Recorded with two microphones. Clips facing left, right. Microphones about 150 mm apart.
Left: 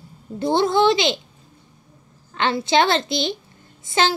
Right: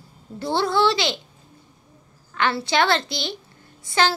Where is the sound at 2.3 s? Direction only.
20° left (ahead or behind).